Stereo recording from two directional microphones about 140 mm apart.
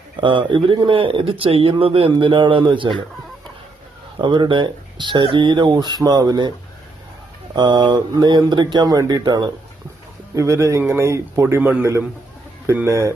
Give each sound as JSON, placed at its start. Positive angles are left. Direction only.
{"t": 0.2, "sound": "speech", "side_deg": -35}
{"t": 4.2, "sound": "speech", "side_deg": -35}
{"t": 7.5, "sound": "speech", "side_deg": -30}